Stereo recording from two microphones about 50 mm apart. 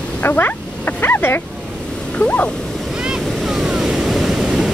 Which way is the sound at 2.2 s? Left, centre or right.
Left.